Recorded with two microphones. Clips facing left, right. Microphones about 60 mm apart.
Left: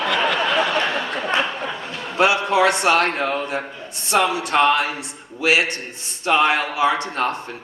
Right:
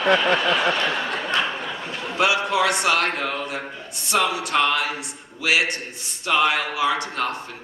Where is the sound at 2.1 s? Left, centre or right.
Left.